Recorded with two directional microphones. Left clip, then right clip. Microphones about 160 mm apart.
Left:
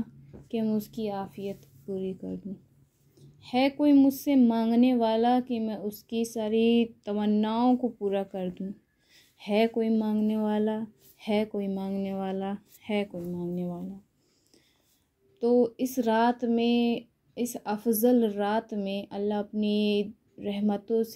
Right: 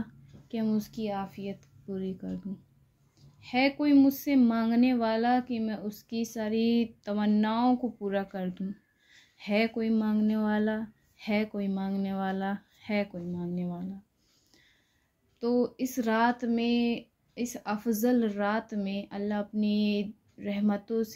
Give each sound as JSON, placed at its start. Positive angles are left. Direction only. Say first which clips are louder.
{"t": 0.0, "sound": "speech", "louder": "left 3 dB", "side_deg": 15}
{"t": 2.0, "sound": "speech", "louder": "left 2 dB", "side_deg": 0}
{"t": 3.4, "sound": "speech", "louder": "left 2 dB", "side_deg": 20}
{"t": 11.1, "sound": "speech", "louder": "left 3 dB", "side_deg": 20}
{"t": 12.9, "sound": "speech", "louder": "left 1 dB", "side_deg": 20}
{"t": 15.5, "sound": "speech", "louder": "left 5 dB", "side_deg": -15}
{"t": 15.8, "sound": "speech", "louder": "left 2 dB", "side_deg": 25}